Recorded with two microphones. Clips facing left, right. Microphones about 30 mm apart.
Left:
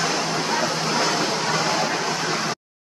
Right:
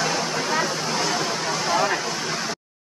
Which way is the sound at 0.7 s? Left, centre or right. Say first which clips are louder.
Left 2 dB; left.